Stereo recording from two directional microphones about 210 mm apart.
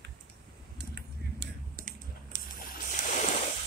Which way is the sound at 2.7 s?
40° left (ahead or behind).